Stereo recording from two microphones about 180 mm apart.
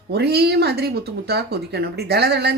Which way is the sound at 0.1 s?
65° right (ahead or behind).